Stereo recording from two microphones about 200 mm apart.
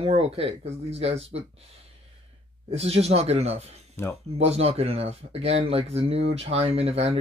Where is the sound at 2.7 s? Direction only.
30° right (ahead or behind).